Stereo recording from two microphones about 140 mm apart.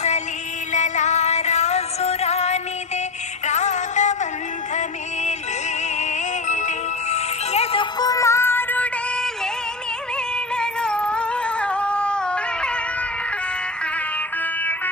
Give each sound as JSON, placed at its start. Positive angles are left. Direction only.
{"t": 0.7, "sound": "music", "side_deg": 60}
{"t": 5.9, "sound": "music", "side_deg": 60}
{"t": 10.5, "sound": "music", "side_deg": 5}